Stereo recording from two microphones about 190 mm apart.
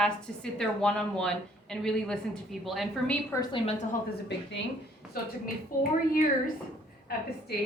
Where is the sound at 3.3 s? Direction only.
25° left (ahead or behind).